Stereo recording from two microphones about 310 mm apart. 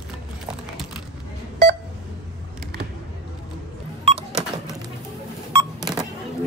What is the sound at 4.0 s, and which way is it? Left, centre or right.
Cash register, centre.